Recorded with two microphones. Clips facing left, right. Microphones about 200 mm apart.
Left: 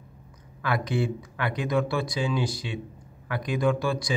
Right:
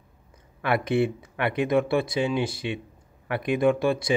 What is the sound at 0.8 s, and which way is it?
Speech, 60° right (ahead or behind).